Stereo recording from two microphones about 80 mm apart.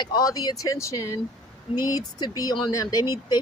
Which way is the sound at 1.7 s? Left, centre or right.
Left.